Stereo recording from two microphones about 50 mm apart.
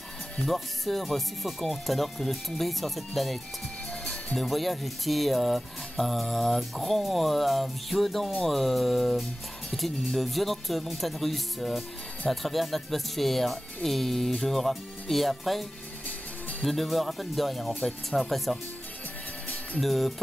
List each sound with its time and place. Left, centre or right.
0.5 s speech: centre
4.0 s music: left
4.4 s speech: centre
16.6 s speech: centre
19.8 s speech: centre